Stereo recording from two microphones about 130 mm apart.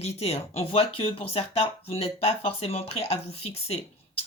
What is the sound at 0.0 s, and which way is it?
Speech, 50° left (ahead or behind).